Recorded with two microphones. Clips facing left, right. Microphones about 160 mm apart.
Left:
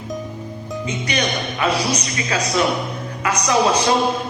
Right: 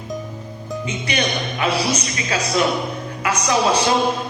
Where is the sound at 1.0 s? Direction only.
30° right (ahead or behind).